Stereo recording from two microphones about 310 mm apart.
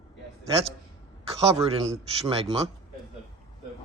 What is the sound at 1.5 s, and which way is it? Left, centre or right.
Speech, centre.